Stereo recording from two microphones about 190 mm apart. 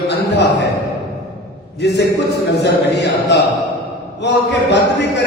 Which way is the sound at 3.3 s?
65° left (ahead or behind).